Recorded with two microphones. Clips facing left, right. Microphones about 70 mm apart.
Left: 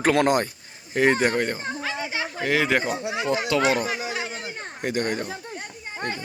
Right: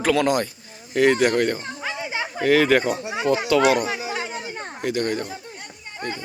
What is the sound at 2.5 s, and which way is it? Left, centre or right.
Speech, centre.